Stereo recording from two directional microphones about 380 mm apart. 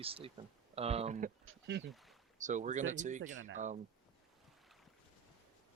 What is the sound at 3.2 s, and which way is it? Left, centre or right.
Speech, right.